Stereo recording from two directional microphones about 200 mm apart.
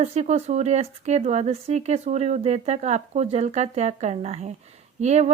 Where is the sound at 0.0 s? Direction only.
35° right (ahead or behind).